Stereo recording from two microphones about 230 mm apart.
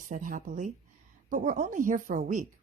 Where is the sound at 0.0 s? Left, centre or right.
Right.